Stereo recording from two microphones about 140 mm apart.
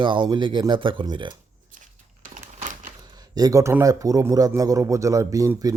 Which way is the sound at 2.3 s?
65° right (ahead or behind).